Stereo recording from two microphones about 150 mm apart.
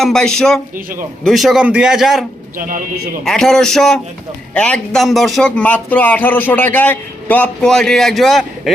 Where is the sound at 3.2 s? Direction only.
5° left (ahead or behind).